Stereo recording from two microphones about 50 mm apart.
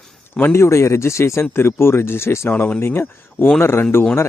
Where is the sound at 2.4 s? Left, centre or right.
Left.